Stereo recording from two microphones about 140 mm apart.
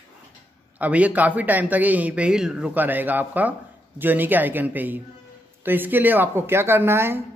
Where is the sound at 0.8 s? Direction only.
10° right (ahead or behind).